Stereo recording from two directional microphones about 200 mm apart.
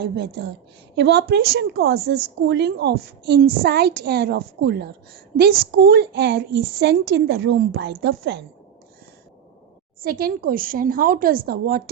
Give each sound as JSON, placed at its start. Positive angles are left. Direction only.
{"t": 0.0, "sound": "a woman's voice", "side_deg": -55}
{"t": 10.0, "sound": "a woman's voice", "side_deg": -50}